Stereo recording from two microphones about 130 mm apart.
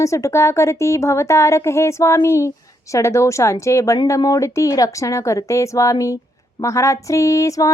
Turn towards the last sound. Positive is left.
turn(degrees=25)  # may be behind; listen again after turning